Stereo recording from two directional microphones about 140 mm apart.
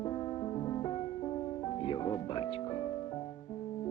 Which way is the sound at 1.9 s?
35° left (ahead or behind).